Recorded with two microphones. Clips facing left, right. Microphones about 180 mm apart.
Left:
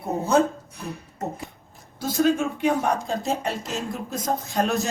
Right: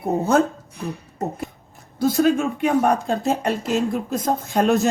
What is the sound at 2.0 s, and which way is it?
Speech, 60° right (ahead or behind).